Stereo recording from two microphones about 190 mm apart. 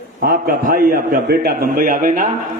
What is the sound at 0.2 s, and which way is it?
A man's voice, 50° right (ahead or behind).